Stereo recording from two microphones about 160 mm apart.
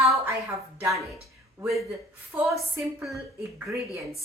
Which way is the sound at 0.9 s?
Centre (ahead or behind).